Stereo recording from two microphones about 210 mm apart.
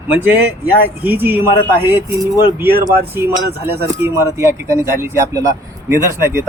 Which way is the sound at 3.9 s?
10° right (ahead or behind).